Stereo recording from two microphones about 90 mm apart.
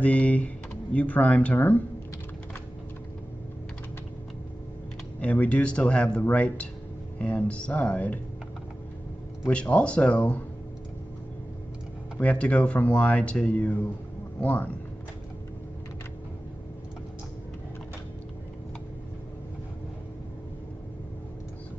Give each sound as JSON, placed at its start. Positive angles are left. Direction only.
{"t": 0.0, "sound": "speech", "side_deg": 15}
{"t": 5.2, "sound": "speech", "side_deg": 15}
{"t": 9.5, "sound": "speech", "side_deg": 15}
{"t": 12.2, "sound": "speech", "side_deg": 15}